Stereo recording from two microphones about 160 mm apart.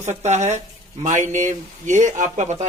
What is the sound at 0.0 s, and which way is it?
Speech, 45° right (ahead or behind).